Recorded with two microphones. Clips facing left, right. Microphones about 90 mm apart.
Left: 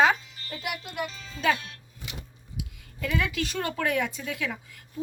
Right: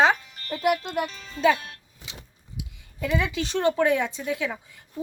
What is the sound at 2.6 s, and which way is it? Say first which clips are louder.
A woman's voice: right 3 dB; 20° right (ahead or behind).